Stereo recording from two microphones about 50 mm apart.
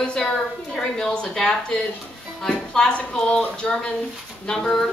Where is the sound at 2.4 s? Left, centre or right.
Centre.